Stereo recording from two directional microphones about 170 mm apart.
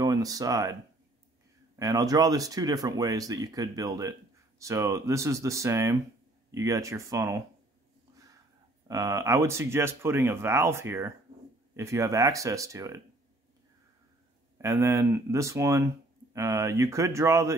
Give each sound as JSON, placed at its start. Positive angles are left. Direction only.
{"t": 0.0, "sound": "speech", "side_deg": -20}
{"t": 1.8, "sound": "speech", "side_deg": -20}
{"t": 8.8, "sound": "speech", "side_deg": -20}
{"t": 14.6, "sound": "speech", "side_deg": -15}